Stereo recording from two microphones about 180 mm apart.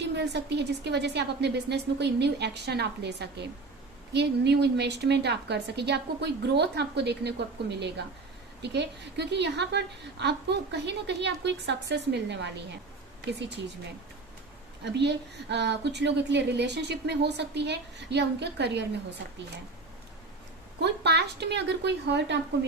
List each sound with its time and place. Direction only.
0.0 s a woman's voice: 75° right (ahead or behind)
14.9 s a woman's voice: 70° right (ahead or behind)
20.8 s a woman's voice: 70° right (ahead or behind)